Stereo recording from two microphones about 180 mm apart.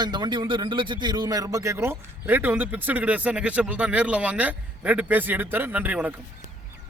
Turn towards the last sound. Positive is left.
turn(degrees=-10)  # may be behind; listen again after turning